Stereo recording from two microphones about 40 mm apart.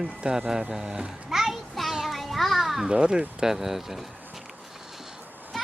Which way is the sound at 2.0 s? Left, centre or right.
Centre.